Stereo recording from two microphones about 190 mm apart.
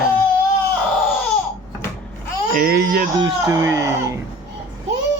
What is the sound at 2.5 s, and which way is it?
Baby cry, 55° right (ahead or behind).